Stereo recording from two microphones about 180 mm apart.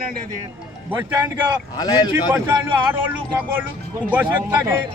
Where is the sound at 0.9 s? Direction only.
10° right (ahead or behind).